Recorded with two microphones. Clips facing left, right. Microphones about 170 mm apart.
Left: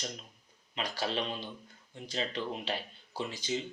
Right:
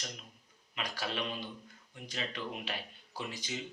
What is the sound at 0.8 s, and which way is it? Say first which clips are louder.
Speech: left 4 dB; 30° left (ahead or behind).